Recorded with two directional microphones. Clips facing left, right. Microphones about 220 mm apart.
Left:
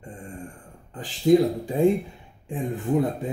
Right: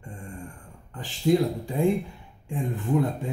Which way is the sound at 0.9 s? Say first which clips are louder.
Left 4 dB; 20° left (ahead or behind).